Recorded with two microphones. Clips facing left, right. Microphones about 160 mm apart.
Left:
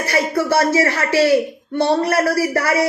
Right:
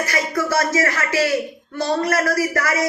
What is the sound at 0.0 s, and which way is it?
A man's voice, 30° left (ahead or behind).